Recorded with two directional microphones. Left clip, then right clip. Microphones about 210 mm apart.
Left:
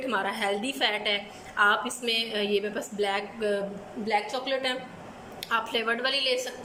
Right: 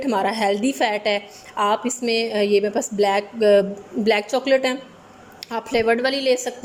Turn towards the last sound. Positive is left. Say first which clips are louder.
# right 7 dB
turn(degrees=-35)  # may be behind; listen again after turning